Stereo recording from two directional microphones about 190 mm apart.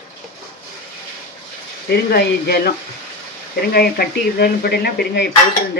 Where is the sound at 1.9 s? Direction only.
55° left (ahead or behind).